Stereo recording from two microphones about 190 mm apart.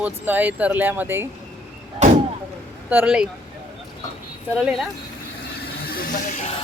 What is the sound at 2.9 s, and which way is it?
Speech, 5° right (ahead or behind).